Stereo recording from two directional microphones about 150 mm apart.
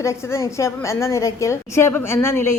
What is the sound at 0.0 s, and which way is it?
A woman's voice, 20° left (ahead or behind).